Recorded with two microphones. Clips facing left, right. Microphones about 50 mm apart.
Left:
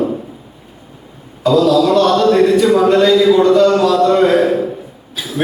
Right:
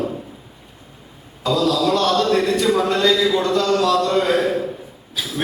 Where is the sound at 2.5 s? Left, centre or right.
Centre.